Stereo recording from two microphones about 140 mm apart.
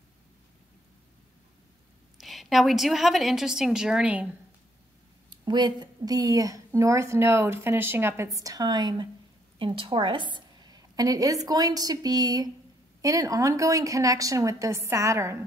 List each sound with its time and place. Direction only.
2.1 s a woman's voice: centre (ahead or behind)
5.3 s a woman's voice: 30° right (ahead or behind)
10.3 s a sound: 30° right (ahead or behind)
11.4 s a woman's voice: 25° right (ahead or behind)